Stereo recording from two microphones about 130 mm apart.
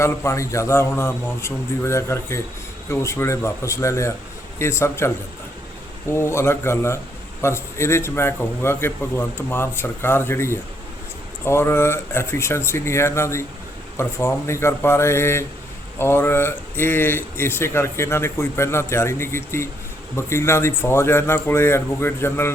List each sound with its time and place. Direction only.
0.0 s speech: 20° left (ahead or behind)